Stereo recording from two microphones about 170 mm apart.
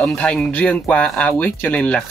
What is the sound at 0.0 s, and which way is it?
Speech, 5° left (ahead or behind).